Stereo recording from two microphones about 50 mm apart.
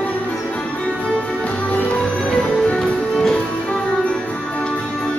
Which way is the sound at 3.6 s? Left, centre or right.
Left.